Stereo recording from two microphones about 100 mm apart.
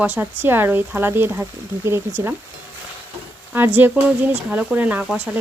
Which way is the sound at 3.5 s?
20° right (ahead or behind).